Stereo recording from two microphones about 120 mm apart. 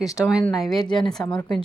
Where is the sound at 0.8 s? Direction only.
40° left (ahead or behind).